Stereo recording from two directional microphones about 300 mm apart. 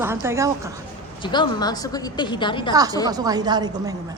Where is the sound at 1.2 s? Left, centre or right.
Centre.